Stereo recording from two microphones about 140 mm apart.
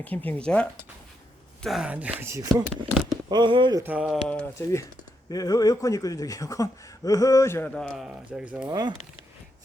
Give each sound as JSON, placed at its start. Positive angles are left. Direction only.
{"t": 0.0, "sound": "speech", "side_deg": 10}
{"t": 1.6, "sound": "speech", "side_deg": -5}
{"t": 2.1, "sound": "speech", "side_deg": -20}
{"t": 3.8, "sound": "speech", "side_deg": -10}
{"t": 4.5, "sound": "speech", "side_deg": 20}
{"t": 7.7, "sound": "a man's voice", "side_deg": 5}
{"t": 8.0, "sound": "speech", "side_deg": -10}
{"t": 8.6, "sound": "speech", "side_deg": -30}